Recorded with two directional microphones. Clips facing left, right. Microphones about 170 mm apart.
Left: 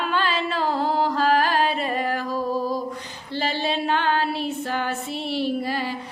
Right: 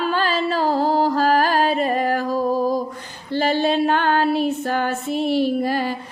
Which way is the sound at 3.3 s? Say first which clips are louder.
Right 7 dB; 50° right (ahead or behind).